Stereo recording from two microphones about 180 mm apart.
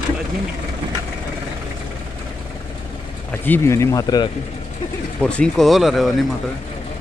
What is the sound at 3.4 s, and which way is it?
Speech, 15° left (ahead or behind).